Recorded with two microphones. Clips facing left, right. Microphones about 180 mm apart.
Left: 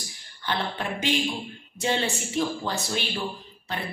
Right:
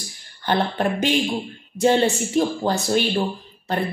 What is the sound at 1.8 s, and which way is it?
Speech, 45° right (ahead or behind).